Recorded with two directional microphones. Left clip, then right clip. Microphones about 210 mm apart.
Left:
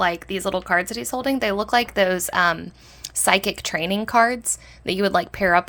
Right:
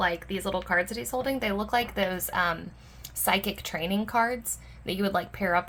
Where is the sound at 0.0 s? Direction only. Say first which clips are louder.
Left 6 dB; 45° left (ahead or behind).